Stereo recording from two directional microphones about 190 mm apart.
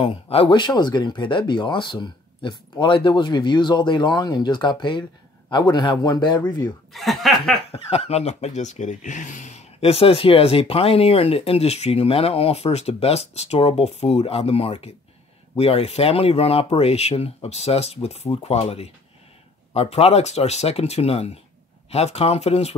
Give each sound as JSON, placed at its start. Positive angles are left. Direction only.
{"t": 0.0, "sound": "speech", "side_deg": 30}
{"t": 6.9, "sound": "speech", "side_deg": 0}
{"t": 7.7, "sound": "speech", "side_deg": 30}